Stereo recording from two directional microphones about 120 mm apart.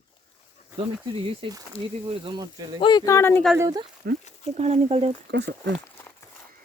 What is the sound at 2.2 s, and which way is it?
Speech, 35° right (ahead or behind).